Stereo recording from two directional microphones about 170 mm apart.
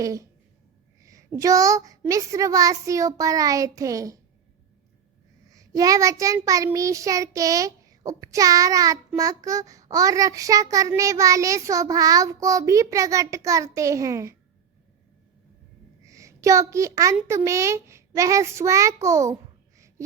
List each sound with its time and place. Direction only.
0.0 s child singing: 20° right (ahead or behind)
5.5 s child singing: 20° right (ahead or behind)
16.0 s a woman's voice: 20° right (ahead or behind)